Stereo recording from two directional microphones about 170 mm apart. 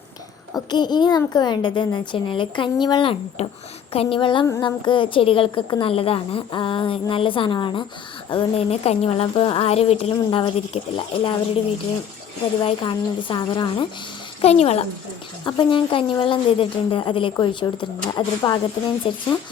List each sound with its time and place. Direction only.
0.5 s speech: 25° left (ahead or behind)
12.6 s speech: 30° left (ahead or behind)